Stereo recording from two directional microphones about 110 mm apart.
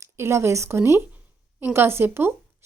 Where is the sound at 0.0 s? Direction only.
25° right (ahead or behind).